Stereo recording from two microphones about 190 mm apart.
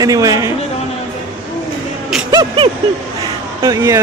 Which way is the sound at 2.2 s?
25° right (ahead or behind).